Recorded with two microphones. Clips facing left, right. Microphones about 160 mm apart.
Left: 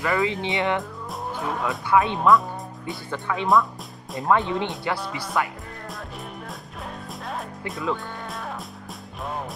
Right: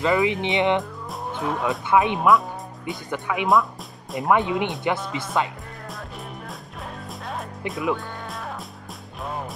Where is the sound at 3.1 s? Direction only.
15° right (ahead or behind).